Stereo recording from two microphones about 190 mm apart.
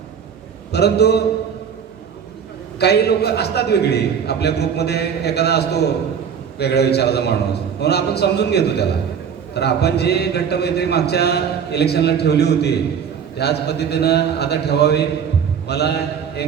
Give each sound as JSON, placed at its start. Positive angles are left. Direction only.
{"t": 0.7, "sound": "speech", "side_deg": 60}
{"t": 2.7, "sound": "speech", "side_deg": 60}
{"t": 15.6, "sound": "mantra", "side_deg": 60}